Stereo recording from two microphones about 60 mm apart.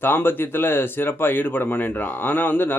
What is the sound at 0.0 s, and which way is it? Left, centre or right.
Speech, left.